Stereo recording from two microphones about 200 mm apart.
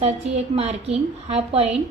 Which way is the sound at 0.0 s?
30° right (ahead or behind).